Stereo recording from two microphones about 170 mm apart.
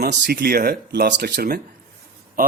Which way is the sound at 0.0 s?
65° right (ahead or behind).